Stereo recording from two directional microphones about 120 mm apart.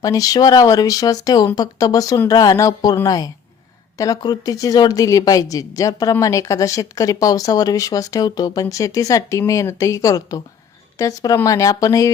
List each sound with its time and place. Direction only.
0.0 s speech: 30° left (ahead or behind)